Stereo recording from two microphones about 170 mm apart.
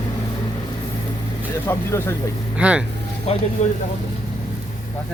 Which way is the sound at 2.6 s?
5° right (ahead or behind).